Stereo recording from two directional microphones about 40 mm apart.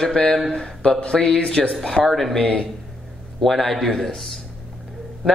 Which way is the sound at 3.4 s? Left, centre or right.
Centre.